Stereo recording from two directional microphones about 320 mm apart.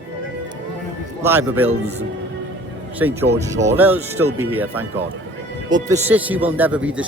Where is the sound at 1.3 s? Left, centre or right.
Centre.